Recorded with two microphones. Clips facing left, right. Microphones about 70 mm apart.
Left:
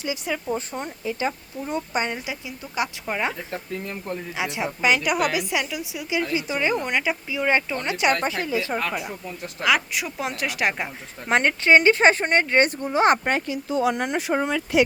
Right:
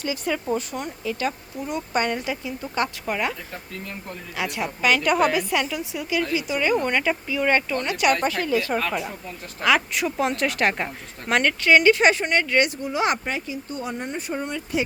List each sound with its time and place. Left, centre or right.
0.0 s a woman's voice: centre
2.1 s a woman's voice: centre
4.4 s a woman's voice: left
6.3 s speech: left
6.8 s a woman's voice: centre
11.3 s speech: left
13.5 s speech: left